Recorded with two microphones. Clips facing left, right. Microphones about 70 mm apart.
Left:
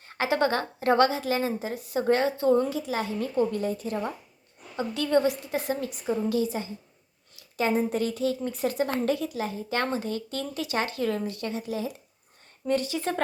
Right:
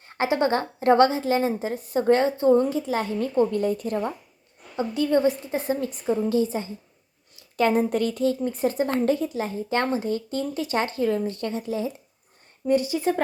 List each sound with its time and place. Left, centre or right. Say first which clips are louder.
0.4 s a woman's voice: right 6 dB; right
4.8 s a woman's voice: right 3 dB; right
7.5 s a woman's voice: right 4 dB; right
12.6 s speech: right 5 dB; centre